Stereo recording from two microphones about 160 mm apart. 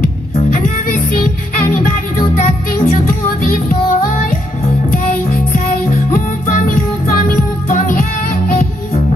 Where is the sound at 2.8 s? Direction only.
55° left (ahead or behind).